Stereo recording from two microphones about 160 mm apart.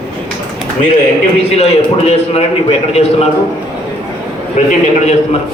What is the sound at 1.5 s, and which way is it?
A man's voice, 40° left (ahead or behind).